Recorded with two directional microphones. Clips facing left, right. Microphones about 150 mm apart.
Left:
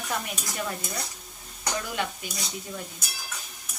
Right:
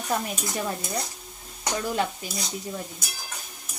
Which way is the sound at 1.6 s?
35° right (ahead or behind).